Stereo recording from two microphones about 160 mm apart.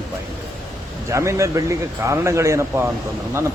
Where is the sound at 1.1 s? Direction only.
20° right (ahead or behind).